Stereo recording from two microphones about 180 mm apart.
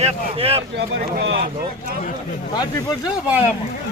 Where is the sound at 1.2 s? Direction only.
75° right (ahead or behind).